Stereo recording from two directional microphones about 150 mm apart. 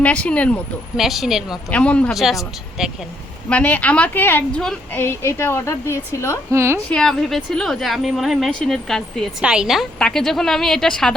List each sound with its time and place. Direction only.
0.0 s a woman's voice: 10° left (ahead or behind)
0.9 s a woman's voice: centre (ahead or behind)
1.7 s a woman's voice: 10° left (ahead or behind)
3.5 s a woman's voice: 10° left (ahead or behind)
6.5 s a woman's voice: 15° right (ahead or behind)
6.9 s a woman's voice: 5° left (ahead or behind)